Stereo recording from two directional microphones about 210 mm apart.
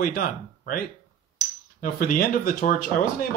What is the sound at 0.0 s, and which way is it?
Speech, 40° left (ahead or behind).